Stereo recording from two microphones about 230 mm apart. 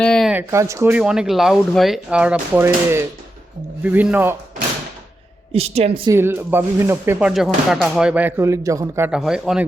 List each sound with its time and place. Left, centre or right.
0.0 s speech: centre
5.5 s a woman's voice: right
6.1 s speech: centre